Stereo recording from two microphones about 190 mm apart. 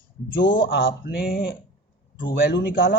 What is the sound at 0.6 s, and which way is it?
Speech, 55° left (ahead or behind).